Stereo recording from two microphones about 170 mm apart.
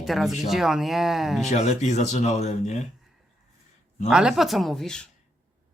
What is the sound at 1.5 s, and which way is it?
Speech, 40° left (ahead or behind).